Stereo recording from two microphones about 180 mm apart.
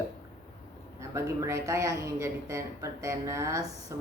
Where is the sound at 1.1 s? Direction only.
15° right (ahead or behind).